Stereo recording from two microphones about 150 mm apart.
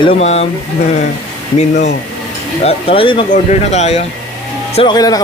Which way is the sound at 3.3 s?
50° left (ahead or behind).